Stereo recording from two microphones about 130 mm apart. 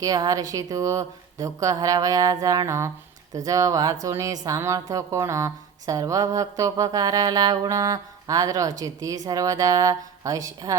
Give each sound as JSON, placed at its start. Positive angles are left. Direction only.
{"t": 0.0, "sound": "a woman's voice", "side_deg": -30}